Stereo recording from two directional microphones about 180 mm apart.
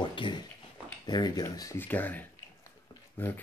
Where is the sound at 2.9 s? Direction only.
10° left (ahead or behind).